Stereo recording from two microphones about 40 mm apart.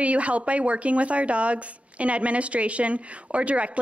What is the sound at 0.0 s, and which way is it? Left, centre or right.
A woman's voice, right.